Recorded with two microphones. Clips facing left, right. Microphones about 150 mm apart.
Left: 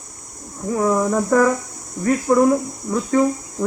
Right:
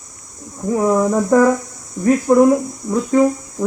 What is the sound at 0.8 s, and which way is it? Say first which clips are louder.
A woman's voice: right 3 dB; 10° right (ahead or behind).